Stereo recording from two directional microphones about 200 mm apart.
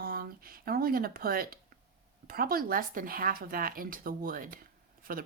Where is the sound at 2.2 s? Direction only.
45° right (ahead or behind).